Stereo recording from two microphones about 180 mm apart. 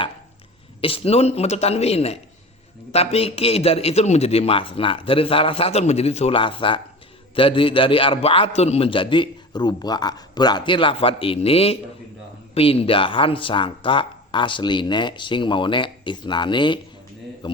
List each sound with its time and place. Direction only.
0.8 s a man's voice: 30° left (ahead or behind)